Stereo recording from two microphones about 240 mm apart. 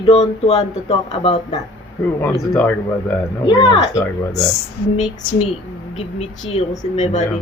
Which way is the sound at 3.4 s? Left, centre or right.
Left.